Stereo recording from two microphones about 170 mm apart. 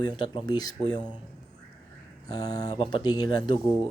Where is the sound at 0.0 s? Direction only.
25° left (ahead or behind).